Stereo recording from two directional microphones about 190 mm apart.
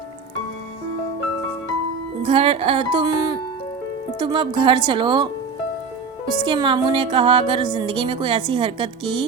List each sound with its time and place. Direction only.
2.2 s music: 30° right (ahead or behind)
4.2 s a woman's voice: 25° right (ahead or behind)
6.4 s a woman's voice: 25° right (ahead or behind)